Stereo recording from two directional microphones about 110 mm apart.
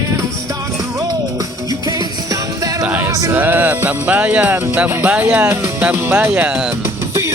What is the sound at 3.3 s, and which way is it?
Music, 15° right (ahead or behind).